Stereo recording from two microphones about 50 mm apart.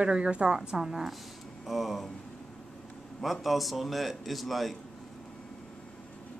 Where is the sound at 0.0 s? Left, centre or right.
Centre.